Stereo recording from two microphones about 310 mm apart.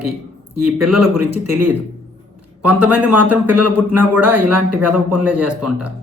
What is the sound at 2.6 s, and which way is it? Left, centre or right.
Speech, centre.